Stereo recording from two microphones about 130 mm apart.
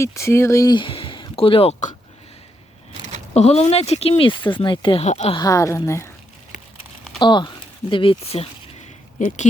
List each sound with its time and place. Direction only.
0.0 s speech: 20° left (ahead or behind); by 1.7 s 45° left (ahead or behind)
3.3 s speech: 55° left (ahead or behind); by 5.0 s 40° left (ahead or behind)
5.0 s speech: 55° left (ahead or behind)
5.4 s a woman's voice: 25° left (ahead or behind)
7.2 s speech: 35° left (ahead or behind)
9.1 s speech: 70° left (ahead or behind)